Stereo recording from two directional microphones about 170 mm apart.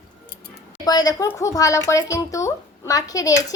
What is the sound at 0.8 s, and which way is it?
Speech, 20° left (ahead or behind).